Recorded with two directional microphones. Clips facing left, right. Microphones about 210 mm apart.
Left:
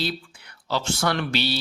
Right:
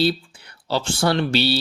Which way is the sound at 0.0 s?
30° right (ahead or behind).